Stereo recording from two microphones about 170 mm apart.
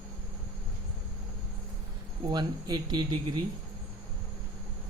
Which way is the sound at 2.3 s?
25° right (ahead or behind).